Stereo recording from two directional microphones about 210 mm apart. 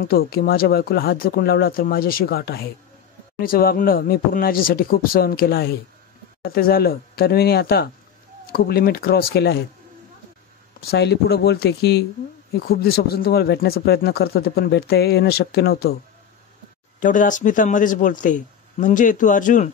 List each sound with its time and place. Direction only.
0.0 s speech: 45° left (ahead or behind)
10.9 s speech: 50° left (ahead or behind)
17.0 s speech: 40° left (ahead or behind)